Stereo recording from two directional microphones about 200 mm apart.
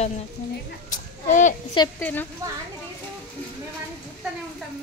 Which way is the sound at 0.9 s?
40° left (ahead or behind).